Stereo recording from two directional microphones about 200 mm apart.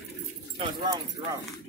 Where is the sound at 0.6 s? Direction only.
25° right (ahead or behind).